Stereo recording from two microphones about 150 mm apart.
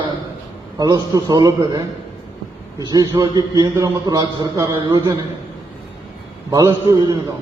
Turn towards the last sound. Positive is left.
turn(degrees=-20)  # may be behind; listen again after turning